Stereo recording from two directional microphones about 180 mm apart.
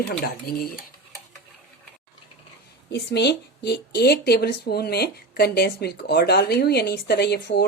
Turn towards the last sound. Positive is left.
turn(degrees=65)  # may be behind; listen again after turning